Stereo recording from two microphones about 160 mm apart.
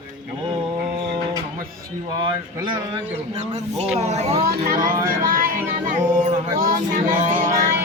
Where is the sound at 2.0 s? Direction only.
30° right (ahead or behind).